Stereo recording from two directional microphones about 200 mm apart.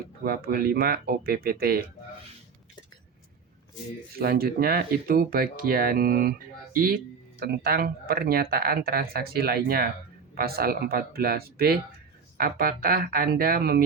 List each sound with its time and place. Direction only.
0.3 s speech: 50° right (ahead or behind)
4.1 s speech: 50° right (ahead or behind)